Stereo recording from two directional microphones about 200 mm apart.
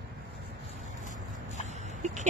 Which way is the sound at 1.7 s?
35° right (ahead or behind).